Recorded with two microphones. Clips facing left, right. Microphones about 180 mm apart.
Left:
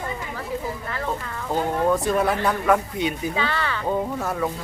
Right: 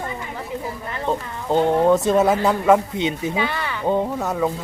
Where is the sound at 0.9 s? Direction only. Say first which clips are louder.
Right 7 dB; 25° right (ahead or behind).